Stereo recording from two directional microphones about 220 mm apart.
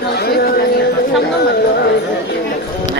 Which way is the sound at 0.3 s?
45° left (ahead or behind).